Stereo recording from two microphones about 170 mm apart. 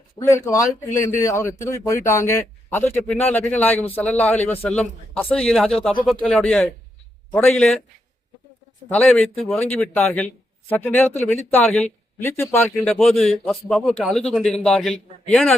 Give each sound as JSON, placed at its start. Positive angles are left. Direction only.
{"t": 0.2, "sound": "speech", "side_deg": 15}
{"t": 8.9, "sound": "speech", "side_deg": 5}